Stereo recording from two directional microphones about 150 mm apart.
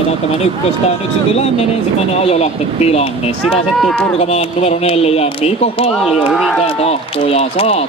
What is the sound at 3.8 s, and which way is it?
Speech, 5° left (ahead or behind).